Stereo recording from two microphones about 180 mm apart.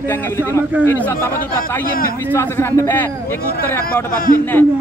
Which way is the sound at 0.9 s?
10° left (ahead or behind).